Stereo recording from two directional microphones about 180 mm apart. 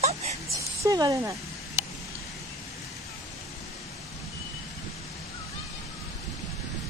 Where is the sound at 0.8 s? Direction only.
20° right (ahead or behind).